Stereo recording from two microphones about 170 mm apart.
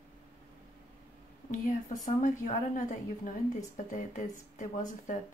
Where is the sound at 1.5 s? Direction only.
50° left (ahead or behind).